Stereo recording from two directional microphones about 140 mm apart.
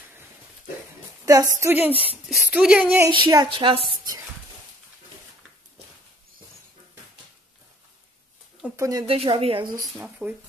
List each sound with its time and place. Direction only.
1.2 s a woman's voice: 25° right (ahead or behind)
1.6 s speech: 15° right (ahead or behind)
3.1 s a woman's voice: 30° right (ahead or behind)
8.6 s a sound: 20° right (ahead or behind)
9.0 s a woman's voice: 40° right (ahead or behind)
9.9 s speech: 10° right (ahead or behind)